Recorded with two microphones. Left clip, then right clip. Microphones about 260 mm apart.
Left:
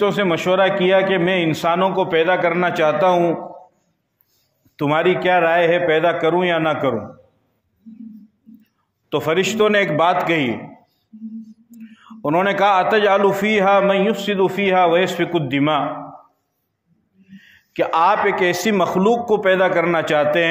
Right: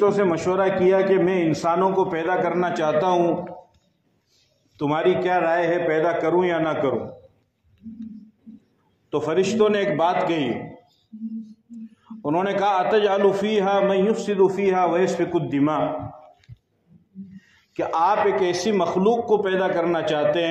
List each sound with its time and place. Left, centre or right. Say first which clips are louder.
0.0 s a man's voice: left 2 dB; left
4.7 s a man's voice: left 4 dB; left
9.1 s a man's voice: left 3 dB; left
11.7 s a man's voice: even; left
17.7 s a man's voice: left 4 dB; left